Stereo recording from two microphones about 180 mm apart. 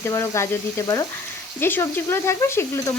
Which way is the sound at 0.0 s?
15° left (ahead or behind).